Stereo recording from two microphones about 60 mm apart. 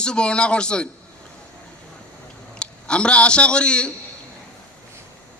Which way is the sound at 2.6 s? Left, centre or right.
Centre.